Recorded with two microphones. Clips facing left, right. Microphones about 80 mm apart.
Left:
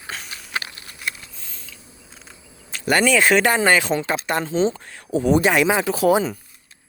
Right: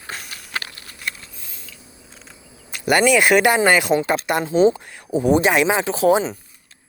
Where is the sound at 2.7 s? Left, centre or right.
Centre; by 6.3 s right.